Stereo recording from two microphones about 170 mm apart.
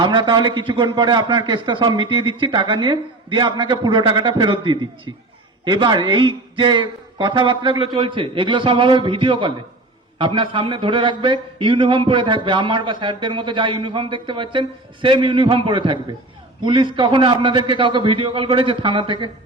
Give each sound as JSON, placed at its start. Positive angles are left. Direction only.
{"t": 0.0, "sound": "speech", "side_deg": -25}